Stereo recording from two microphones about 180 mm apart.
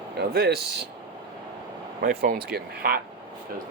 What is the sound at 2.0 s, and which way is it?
Speech, 55° right (ahead or behind).